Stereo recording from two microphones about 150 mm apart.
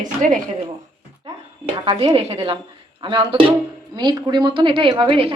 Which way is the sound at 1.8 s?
40° right (ahead or behind).